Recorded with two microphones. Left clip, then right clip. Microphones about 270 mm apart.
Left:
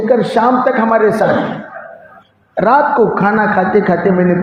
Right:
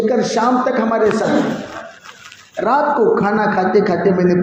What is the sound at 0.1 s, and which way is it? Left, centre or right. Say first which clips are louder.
Speech: left 4 dB; left.